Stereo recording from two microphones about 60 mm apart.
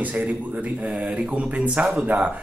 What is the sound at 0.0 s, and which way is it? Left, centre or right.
Speech, right.